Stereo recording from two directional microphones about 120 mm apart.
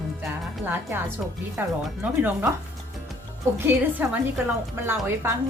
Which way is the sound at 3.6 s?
15° right (ahead or behind).